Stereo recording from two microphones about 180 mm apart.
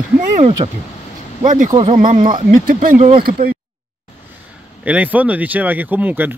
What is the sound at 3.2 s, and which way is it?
Speech, 55° right (ahead or behind).